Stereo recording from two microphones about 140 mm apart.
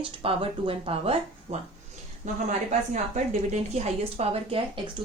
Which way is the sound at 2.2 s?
60° right (ahead or behind).